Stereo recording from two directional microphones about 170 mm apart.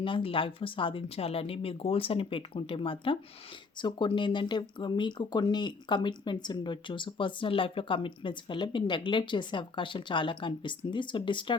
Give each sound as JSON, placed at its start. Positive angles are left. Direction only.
{"t": 0.0, "sound": "speech", "side_deg": 30}